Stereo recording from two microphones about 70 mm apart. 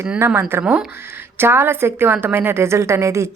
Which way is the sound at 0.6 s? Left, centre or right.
Centre.